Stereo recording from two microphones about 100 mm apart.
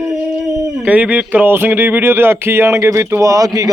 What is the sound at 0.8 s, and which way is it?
Speech, 15° right (ahead or behind).